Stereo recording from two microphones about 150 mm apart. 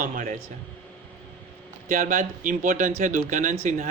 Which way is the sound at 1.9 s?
60° right (ahead or behind).